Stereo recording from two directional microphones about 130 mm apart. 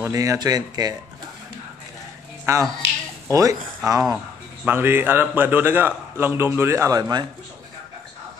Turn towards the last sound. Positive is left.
turn(degrees=-30)  # may be behind; listen again after turning